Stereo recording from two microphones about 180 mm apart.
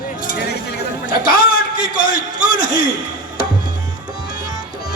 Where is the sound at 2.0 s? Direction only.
50° left (ahead or behind).